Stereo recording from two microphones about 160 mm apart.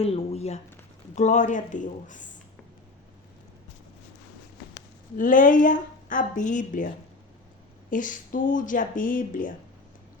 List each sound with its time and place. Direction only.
0.0 s a sound: 40° left (ahead or behind)
1.1 s speech: 50° left (ahead or behind)
4.7 s speech: 55° left (ahead or behind)